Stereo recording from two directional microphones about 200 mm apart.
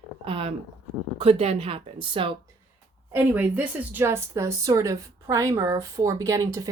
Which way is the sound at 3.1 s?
10° right (ahead or behind).